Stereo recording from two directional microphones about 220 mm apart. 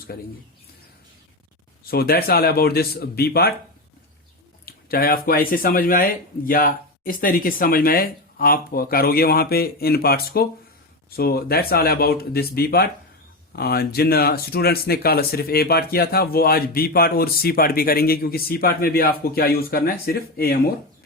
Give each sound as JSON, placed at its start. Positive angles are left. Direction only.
{"t": 0.1, "sound": "speech", "side_deg": 45}
{"t": 1.8, "sound": "speech", "side_deg": 45}
{"t": 4.6, "sound": "speech", "side_deg": 45}